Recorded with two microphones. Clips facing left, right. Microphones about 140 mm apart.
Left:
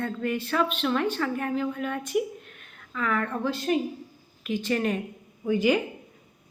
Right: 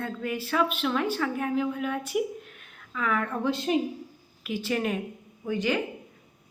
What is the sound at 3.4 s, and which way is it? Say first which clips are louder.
Speech: even; 20° right (ahead or behind).